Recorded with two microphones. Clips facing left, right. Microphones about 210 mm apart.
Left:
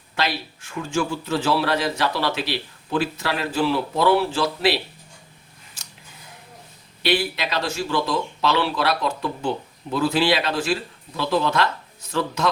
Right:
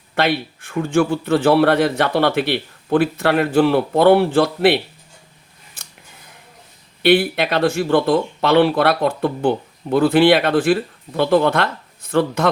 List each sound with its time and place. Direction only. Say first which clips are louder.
0.2 s a man's voice: right 7 dB; 60° right (ahead or behind)
7.0 s a man's voice: right 8 dB; 55° right (ahead or behind)